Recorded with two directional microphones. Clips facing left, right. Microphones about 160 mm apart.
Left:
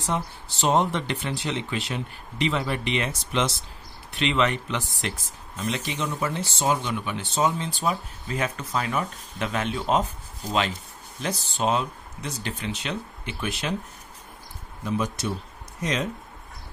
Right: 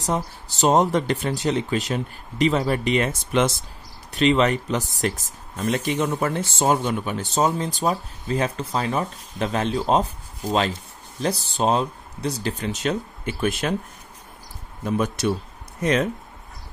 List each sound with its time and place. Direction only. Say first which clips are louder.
0.0 s speech: right 3 dB; 40° right (ahead or behind)
14.9 s speech: right 5 dB; 65° right (ahead or behind)